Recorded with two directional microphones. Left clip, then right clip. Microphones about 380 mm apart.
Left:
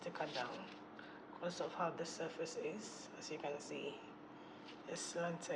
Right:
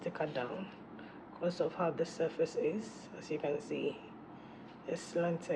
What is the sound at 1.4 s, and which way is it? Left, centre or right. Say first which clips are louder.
Speech: right 7 dB; centre.